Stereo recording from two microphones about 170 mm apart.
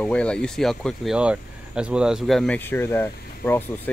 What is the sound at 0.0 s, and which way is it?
Speech, 5° left (ahead or behind).